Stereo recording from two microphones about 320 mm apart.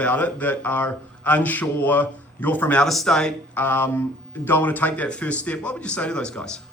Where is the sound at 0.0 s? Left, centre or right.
Centre.